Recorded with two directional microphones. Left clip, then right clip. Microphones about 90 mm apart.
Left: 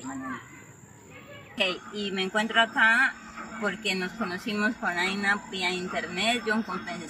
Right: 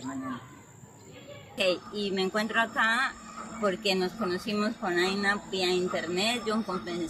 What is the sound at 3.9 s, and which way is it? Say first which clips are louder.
A woman's voice: right 1 dB; 45° right (ahead or behind).